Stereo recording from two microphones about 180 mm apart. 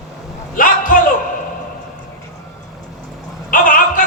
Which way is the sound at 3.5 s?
50° left (ahead or behind).